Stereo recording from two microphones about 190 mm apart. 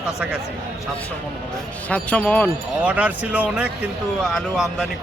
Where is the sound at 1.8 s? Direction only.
5° left (ahead or behind).